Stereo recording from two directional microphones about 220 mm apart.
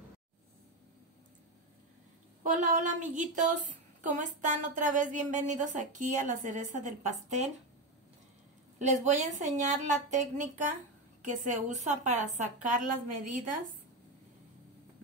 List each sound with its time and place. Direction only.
2.4 s a woman's voice: 35° right (ahead or behind)
8.7 s a woman's voice: 35° right (ahead or behind)